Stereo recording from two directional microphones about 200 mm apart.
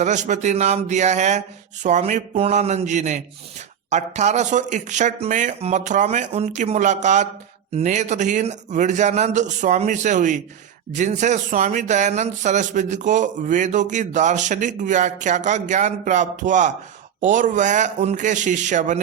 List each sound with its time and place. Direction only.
0.0 s speech: 35° right (ahead or behind)